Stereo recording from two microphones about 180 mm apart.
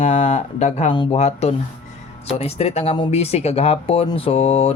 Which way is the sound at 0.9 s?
25° left (ahead or behind).